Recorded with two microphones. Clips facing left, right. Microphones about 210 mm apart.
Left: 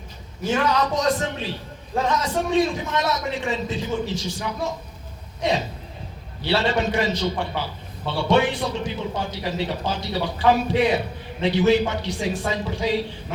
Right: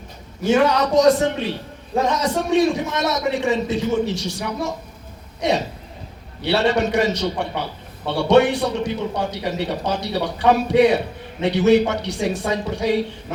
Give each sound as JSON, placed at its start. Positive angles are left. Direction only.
{"t": 0.4, "sound": "a man's voice", "side_deg": -70}
{"t": 5.4, "sound": "a sound", "side_deg": -70}
{"t": 6.4, "sound": "a man's voice", "side_deg": -70}